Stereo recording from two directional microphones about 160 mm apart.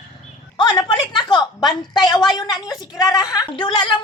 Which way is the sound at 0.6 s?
25° left (ahead or behind).